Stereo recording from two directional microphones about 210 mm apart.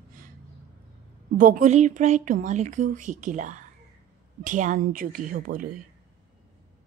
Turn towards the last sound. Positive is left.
turn(degrees=-40)  # may be behind; listen again after turning